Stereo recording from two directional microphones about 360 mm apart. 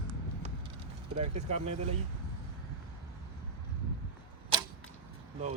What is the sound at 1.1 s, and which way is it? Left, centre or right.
Speech, centre.